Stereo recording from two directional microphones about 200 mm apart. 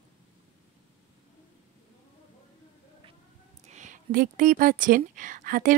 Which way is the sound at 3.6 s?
35° right (ahead or behind).